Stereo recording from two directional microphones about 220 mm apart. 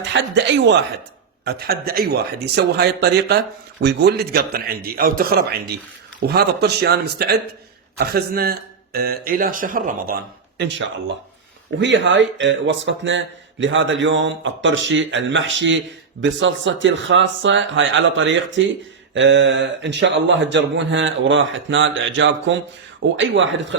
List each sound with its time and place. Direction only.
0.1 s speech: 55° right (ahead or behind); by 10.2 s 40° right (ahead or behind)
10.6 s speech: 55° right (ahead or behind)